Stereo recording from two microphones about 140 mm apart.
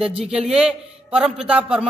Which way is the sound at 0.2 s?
5° right (ahead or behind).